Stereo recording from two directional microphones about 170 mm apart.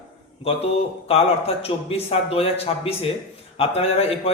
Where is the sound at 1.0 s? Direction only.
35° left (ahead or behind).